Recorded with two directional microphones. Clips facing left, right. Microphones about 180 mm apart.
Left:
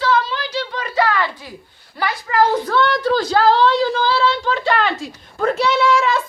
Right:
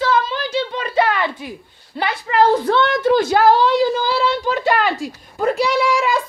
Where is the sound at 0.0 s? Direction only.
20° right (ahead or behind).